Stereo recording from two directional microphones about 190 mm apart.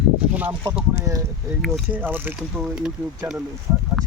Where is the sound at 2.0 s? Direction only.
10° right (ahead or behind).